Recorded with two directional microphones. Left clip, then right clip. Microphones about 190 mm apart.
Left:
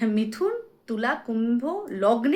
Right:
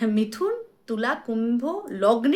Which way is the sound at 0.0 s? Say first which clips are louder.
Right 1 dB; 15° right (ahead or behind).